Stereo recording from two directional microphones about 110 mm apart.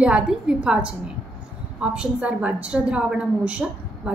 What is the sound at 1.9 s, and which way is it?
A woman's voice, 10° right (ahead or behind).